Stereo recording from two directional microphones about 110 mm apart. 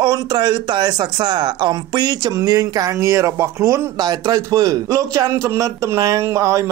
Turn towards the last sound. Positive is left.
turn(degrees=-30)  # may be behind; listen again after turning